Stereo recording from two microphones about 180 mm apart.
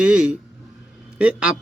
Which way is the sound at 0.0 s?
5° right (ahead or behind).